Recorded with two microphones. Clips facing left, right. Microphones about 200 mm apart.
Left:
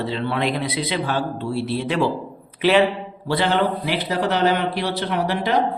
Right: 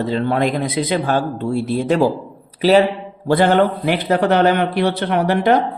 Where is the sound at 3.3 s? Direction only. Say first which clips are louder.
Right 6 dB; 50° right (ahead or behind).